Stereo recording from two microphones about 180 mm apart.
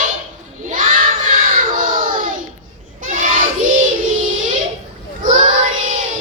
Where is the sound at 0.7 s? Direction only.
50° right (ahead or behind).